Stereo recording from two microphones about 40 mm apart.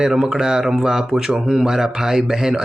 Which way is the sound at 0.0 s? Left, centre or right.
Centre.